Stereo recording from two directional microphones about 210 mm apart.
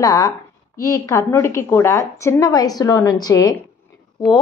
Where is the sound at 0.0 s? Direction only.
15° left (ahead or behind).